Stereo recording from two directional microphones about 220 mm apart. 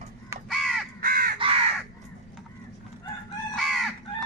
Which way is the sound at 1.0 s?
40° right (ahead or behind).